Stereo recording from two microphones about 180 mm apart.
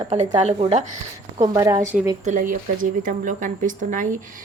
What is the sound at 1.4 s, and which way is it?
Speech, 20° right (ahead or behind).